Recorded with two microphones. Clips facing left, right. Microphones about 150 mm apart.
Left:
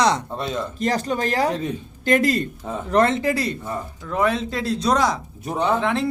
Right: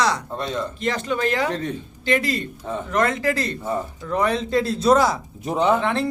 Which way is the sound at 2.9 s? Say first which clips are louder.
Left 4 dB; 30° left (ahead or behind).